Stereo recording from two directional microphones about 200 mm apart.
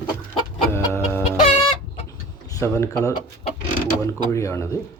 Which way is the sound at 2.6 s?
15° left (ahead or behind).